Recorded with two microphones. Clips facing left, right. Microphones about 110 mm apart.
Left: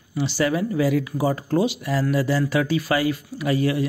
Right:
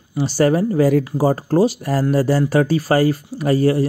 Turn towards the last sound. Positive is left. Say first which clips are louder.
# right 6 dB
turn(degrees=-40)  # may be behind; listen again after turning